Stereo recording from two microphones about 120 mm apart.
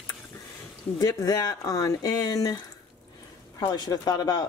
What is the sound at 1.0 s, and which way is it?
Speech, 30° left (ahead or behind).